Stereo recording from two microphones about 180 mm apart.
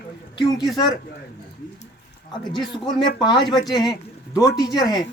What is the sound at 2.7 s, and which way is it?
Speech, 25° left (ahead or behind).